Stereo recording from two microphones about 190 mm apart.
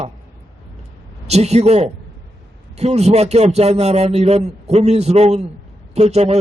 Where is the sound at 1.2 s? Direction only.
35° right (ahead or behind).